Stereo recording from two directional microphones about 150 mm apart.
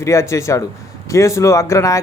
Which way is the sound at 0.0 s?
20° left (ahead or behind).